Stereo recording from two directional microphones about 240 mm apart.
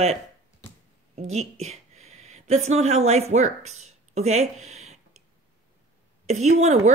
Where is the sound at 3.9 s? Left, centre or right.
Right.